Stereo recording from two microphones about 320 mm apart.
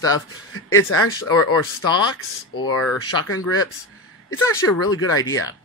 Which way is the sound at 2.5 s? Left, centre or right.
Left.